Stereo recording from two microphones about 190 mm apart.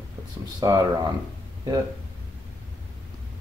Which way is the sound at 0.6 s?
20° right (ahead or behind).